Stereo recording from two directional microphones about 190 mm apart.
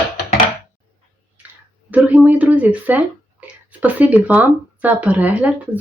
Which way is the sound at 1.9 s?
10° right (ahead or behind).